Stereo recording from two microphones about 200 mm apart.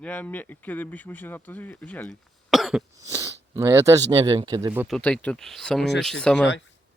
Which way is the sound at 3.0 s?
15° right (ahead or behind).